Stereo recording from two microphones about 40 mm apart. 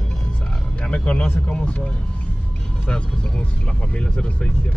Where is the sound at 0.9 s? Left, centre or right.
Left.